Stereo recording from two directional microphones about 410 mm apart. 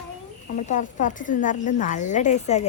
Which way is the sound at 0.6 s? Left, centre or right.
Centre.